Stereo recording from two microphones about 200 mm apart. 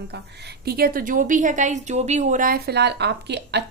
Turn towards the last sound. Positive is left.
turn(degrees=-60)  # may be behind; listen again after turning